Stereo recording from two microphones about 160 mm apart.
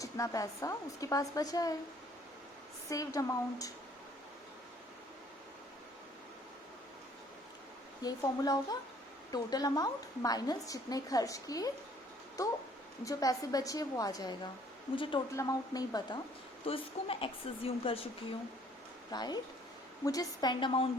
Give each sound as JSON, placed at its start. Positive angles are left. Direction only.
{"t": 0.0, "sound": "a woman's voice", "side_deg": 20}
{"t": 2.9, "sound": "a woman's voice", "side_deg": 20}
{"t": 8.0, "sound": "a woman's voice", "side_deg": 20}
{"t": 13.1, "sound": "a woman's voice", "side_deg": 20}
{"t": 14.9, "sound": "a woman's voice", "side_deg": 35}
{"t": 15.4, "sound": "a woman's voice", "side_deg": 20}
{"t": 16.6, "sound": "a woman's voice", "side_deg": 35}
{"t": 19.1, "sound": "a woman's voice", "side_deg": 25}